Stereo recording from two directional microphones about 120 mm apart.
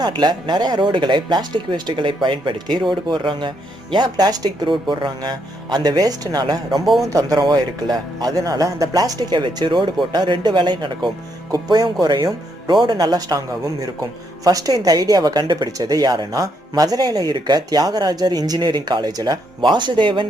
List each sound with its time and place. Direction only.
0.0 s a woman's voice: 40° right (ahead or behind)